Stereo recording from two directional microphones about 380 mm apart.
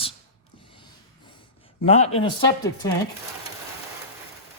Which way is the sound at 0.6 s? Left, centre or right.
Centre.